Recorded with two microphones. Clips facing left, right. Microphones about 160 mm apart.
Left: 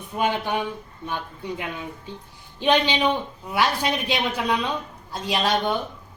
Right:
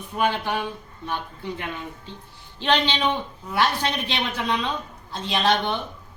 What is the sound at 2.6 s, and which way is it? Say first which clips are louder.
A woman's voice: left 2 dB; 10° left (ahead or behind).